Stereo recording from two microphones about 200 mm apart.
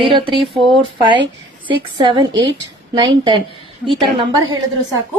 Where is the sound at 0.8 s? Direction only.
25° right (ahead or behind).